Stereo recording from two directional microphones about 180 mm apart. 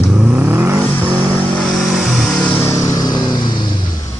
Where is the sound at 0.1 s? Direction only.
5° right (ahead or behind).